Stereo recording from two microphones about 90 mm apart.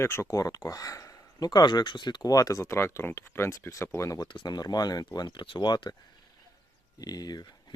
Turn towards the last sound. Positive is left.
turn(degrees=50)  # may be behind; listen again after turning